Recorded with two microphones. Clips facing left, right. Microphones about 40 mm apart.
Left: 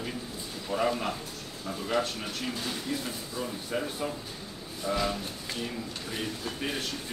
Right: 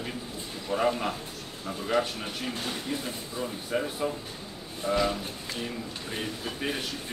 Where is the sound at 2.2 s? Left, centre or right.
Centre.